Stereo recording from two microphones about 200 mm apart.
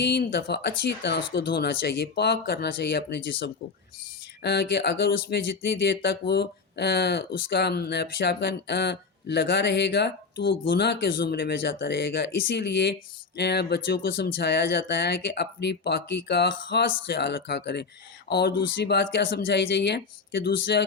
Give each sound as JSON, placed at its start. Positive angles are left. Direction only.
{"t": 0.0, "sound": "speech", "side_deg": 55}